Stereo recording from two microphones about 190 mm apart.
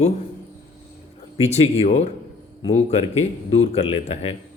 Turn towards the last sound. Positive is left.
turn(degrees=30)  # may be behind; listen again after turning